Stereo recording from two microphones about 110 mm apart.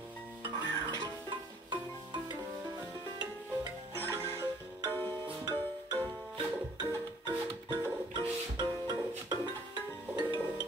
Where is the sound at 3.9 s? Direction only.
25° right (ahead or behind).